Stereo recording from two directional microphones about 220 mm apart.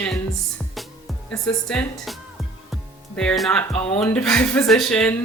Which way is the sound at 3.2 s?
5° left (ahead or behind).